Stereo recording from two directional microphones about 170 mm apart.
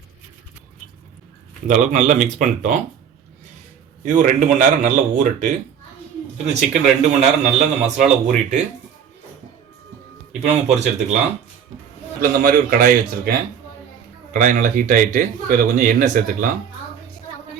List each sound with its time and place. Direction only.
1.6 s a man's voice: 45° right (ahead or behind)
4.0 s a man's voice: 45° right (ahead or behind)
10.4 s speech: 40° right (ahead or behind)
12.4 s speech: 55° right (ahead or behind)
14.3 s a man's voice: 50° right (ahead or behind)